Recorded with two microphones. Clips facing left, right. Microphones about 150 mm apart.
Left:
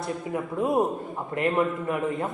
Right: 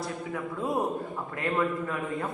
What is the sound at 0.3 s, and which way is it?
A man's voice, 25° left (ahead or behind).